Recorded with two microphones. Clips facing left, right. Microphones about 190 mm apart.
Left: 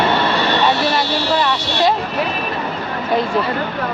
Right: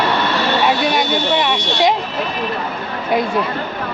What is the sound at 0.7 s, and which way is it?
Buzzer, 10° right (ahead or behind).